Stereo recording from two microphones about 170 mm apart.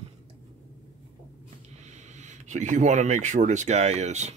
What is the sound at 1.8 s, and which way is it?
Speech, 45° right (ahead or behind).